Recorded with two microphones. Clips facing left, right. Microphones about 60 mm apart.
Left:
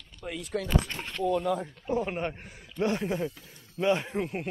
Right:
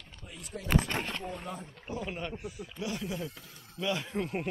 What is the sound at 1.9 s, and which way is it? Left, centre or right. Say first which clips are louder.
Speech: left 7 dB; left.